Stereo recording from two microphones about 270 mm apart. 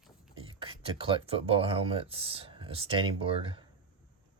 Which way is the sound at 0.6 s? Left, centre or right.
Centre.